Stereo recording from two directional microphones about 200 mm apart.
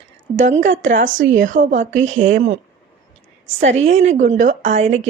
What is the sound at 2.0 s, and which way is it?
Speech, 80° right.